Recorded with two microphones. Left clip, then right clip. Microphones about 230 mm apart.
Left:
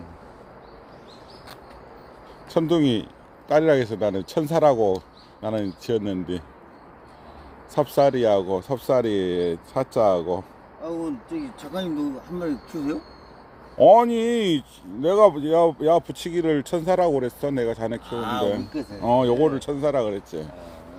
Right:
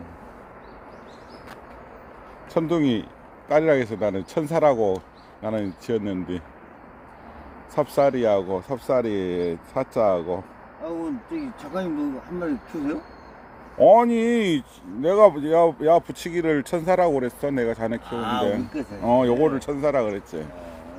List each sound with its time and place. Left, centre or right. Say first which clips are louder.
2.5 s speech: left 2 dB; centre
7.8 s speech: left 1 dB; centre
11.7 s speech: right 1 dB; left
13.7 s speech: left 1 dB; centre